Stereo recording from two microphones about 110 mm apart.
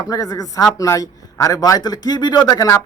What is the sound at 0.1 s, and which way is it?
A man's voice, 35° left (ahead or behind).